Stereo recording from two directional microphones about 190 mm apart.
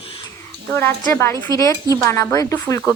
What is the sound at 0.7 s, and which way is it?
A woman's voice, 10° left (ahead or behind).